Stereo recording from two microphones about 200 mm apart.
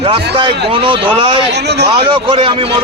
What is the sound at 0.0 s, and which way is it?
A man's voice, 25° right (ahead or behind).